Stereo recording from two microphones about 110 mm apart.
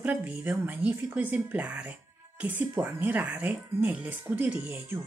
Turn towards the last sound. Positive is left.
turn(degrees=-15)  # may be behind; listen again after turning